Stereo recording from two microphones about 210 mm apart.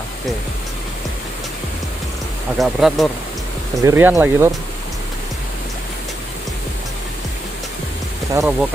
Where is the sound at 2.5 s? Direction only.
Centre (ahead or behind).